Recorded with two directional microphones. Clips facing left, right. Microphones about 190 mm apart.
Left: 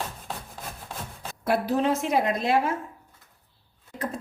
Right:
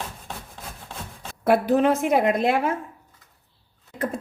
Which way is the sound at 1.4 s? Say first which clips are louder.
Right 5 dB; 55° right (ahead or behind).